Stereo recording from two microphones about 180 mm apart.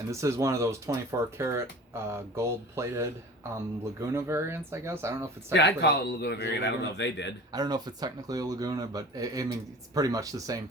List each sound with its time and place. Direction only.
0.1 s speech: 15° right (ahead or behind)
5.5 s speech: 70° left (ahead or behind)
7.5 s speech: 20° right (ahead or behind)